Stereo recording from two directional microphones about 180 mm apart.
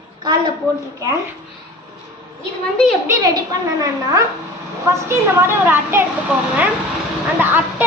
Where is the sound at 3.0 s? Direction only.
20° right (ahead or behind).